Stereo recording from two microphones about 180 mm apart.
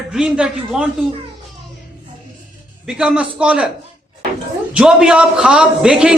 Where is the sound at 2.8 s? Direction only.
5° right (ahead or behind).